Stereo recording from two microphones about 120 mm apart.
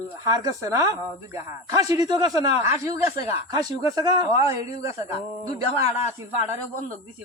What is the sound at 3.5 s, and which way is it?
A man's voice, 30° right (ahead or behind).